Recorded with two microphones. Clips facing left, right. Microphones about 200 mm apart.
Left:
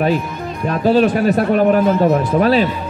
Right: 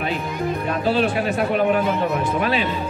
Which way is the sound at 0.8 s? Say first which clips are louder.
Left 8 dB; 45° left (ahead or behind).